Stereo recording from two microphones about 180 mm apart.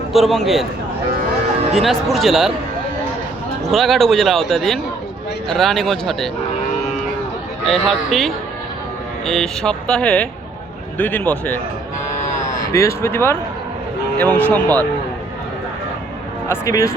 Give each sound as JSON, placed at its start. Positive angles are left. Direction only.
{"t": 0.1, "sound": "speech", "side_deg": 0}
{"t": 1.7, "sound": "speech", "side_deg": 0}
{"t": 3.7, "sound": "speech", "side_deg": 0}
{"t": 7.7, "sound": "speech", "side_deg": 0}
{"t": 12.7, "sound": "speech", "side_deg": 15}
{"t": 16.5, "sound": "speech", "side_deg": 15}